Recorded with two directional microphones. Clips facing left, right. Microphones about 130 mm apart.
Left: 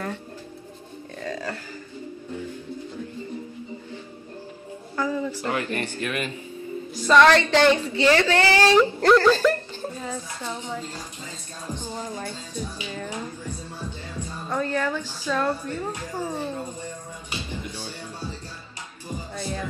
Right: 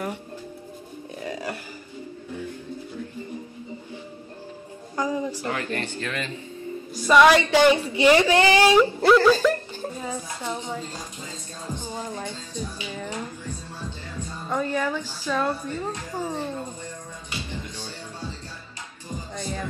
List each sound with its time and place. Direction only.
1.2 s a sound: 15° right (ahead or behind)
4.9 s a sound: 15° right (ahead or behind)
5.5 s a man's voice: 15° left (ahead or behind)
7.0 s a woman's voice: 10° right (ahead or behind)
11.7 s music: 15° right (ahead or behind)
12.5 s a man's voice: 15° left (ahead or behind)
13.1 s music: 15° left (ahead or behind)
14.5 s a woman's voice: 10° right (ahead or behind)
16.5 s a sound: 15° left (ahead or behind)
17.5 s music: 15° left (ahead or behind)